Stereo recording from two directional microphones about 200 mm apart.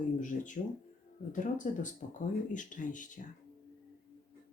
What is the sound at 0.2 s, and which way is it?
Speech, 40° left (ahead or behind).